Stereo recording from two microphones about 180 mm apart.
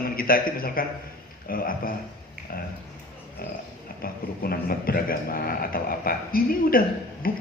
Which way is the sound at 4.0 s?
55° left (ahead or behind).